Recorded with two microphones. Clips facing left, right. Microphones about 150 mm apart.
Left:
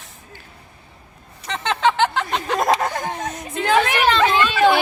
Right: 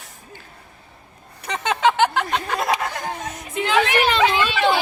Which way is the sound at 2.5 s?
45° left (ahead or behind).